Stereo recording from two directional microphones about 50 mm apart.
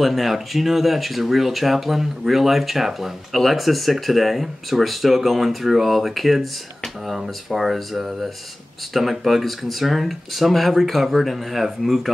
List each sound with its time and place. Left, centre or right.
0.0 s speech: centre